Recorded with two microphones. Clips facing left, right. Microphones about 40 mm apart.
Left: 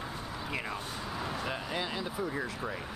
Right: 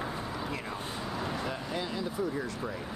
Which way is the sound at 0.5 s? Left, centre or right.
Centre.